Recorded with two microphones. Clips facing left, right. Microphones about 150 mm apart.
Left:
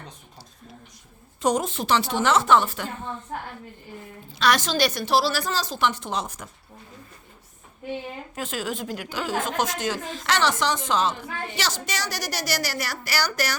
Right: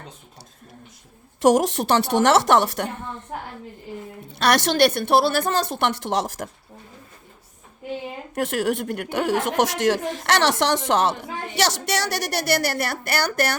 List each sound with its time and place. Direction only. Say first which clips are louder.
1.4 s a woman's voice: right 6 dB; 80° right
4.3 s a woman's voice: right 3 dB; 65° right (ahead or behind); by 6.5 s 85° right
8.4 s a woman's voice: right 8 dB; 70° right (ahead or behind)